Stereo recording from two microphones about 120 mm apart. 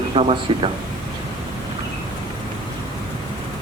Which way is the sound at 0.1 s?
50° right (ahead or behind).